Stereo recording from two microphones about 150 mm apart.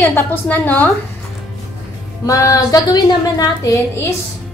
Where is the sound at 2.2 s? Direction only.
20° left (ahead or behind).